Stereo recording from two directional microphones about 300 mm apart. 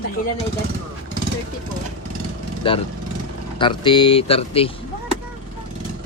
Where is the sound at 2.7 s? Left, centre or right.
Centre.